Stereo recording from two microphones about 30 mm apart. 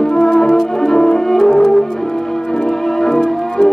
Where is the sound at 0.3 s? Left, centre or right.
Centre.